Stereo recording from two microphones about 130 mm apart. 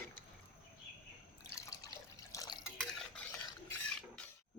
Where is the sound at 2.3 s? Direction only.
30° left (ahead or behind).